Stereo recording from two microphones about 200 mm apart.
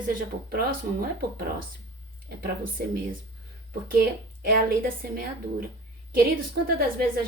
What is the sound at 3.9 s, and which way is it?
Speech, 45° right (ahead or behind).